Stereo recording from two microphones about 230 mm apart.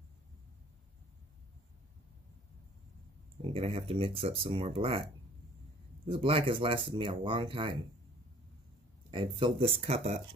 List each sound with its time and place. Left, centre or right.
3.4 s speech: right
6.0 s speech: right
9.1 s speech: right